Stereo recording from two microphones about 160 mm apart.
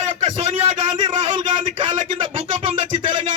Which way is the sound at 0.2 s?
40° right (ahead or behind).